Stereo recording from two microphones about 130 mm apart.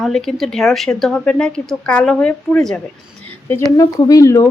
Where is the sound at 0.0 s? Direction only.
Centre (ahead or behind).